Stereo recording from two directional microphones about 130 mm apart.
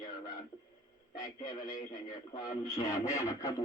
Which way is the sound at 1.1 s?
35° left (ahead or behind).